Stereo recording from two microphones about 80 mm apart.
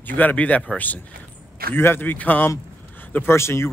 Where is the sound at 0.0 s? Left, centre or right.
Left.